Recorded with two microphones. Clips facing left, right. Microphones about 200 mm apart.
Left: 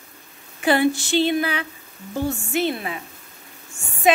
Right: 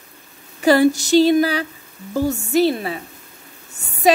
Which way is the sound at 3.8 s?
40° right (ahead or behind).